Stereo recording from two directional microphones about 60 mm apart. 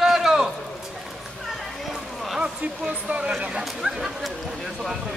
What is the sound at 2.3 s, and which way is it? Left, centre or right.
Speech, centre.